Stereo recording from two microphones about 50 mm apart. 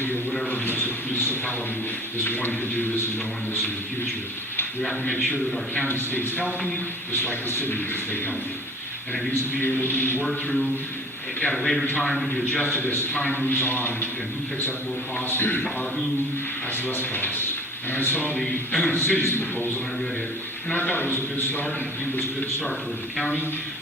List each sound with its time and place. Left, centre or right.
0.5 s a sound: left
2.2 s a man's voice: left
5.0 s speech: left
5.7 s a man's voice: left
9.6 s a man's voice: left
10.2 s a man's voice: centre
12.5 s speech: left
12.7 s a man's voice: left
15.3 s a man's voice: left
16.7 s a man's voice: left
18.3 s speech: centre
18.9 s a man's voice: left
20.7 s a man's voice: left